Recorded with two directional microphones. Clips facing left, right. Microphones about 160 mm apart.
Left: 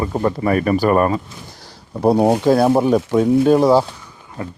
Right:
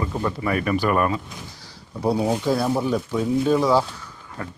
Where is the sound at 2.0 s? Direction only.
60° left (ahead or behind).